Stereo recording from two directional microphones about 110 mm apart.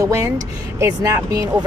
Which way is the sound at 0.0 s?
30° right (ahead or behind).